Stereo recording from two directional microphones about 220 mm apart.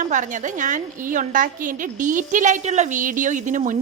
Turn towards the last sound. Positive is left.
turn(degrees=-35)  # may be behind; listen again after turning